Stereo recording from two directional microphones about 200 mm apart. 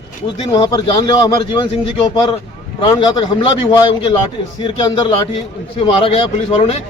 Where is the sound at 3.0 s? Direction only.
25° left (ahead or behind).